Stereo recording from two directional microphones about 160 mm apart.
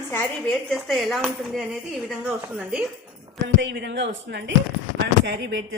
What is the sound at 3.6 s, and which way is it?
Speech, 90° right.